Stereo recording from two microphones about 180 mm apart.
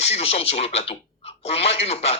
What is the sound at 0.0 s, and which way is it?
Speech, 35° left (ahead or behind).